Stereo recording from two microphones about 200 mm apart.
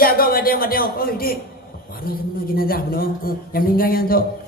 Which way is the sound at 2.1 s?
45° left (ahead or behind).